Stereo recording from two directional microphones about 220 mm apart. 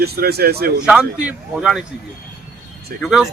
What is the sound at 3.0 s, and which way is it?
Speech, centre (ahead or behind).